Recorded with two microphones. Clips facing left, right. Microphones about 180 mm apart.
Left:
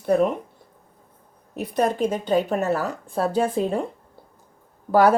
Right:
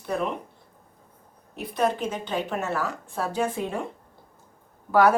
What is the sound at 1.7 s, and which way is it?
Speech, 40° left (ahead or behind).